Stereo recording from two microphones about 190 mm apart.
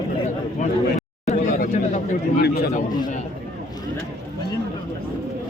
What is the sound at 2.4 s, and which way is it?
Speech, 60° left (ahead or behind).